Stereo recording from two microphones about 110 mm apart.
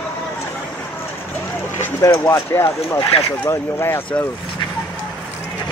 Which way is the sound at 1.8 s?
20° left (ahead or behind).